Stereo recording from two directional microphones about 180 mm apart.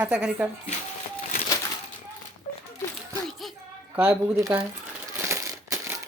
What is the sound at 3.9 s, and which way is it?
Speech, 10° right (ahead or behind).